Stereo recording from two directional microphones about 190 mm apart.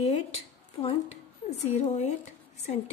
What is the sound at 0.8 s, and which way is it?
Speech, 30° left (ahead or behind).